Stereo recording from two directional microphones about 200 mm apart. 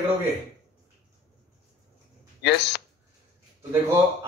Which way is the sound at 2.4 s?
60° left (ahead or behind).